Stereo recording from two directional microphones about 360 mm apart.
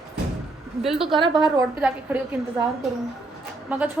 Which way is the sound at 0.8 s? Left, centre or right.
Centre.